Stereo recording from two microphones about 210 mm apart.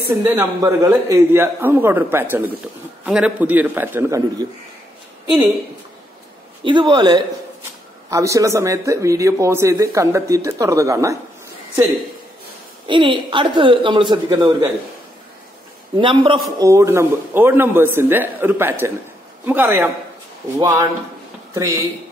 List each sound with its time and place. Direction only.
0.1 s speech: 10° right (ahead or behind)
6.6 s speech: 25° right (ahead or behind)
12.8 s speech: 25° right (ahead or behind)
16.0 s speech: 25° right (ahead or behind)